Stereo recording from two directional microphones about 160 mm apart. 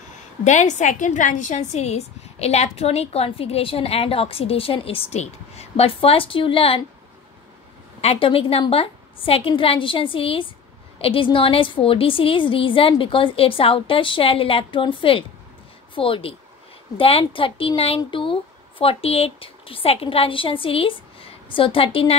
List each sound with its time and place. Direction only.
0.4 s a woman's voice: 50° left (ahead or behind)
8.0 s a woman's voice: 35° left (ahead or behind)